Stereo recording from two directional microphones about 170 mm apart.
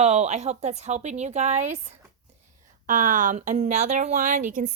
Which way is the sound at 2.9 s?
45° right (ahead or behind).